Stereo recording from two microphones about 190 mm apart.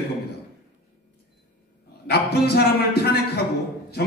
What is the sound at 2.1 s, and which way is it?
A man's voice, 60° left (ahead or behind).